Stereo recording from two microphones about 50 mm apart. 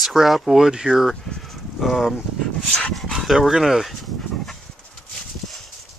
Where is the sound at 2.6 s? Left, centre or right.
Left.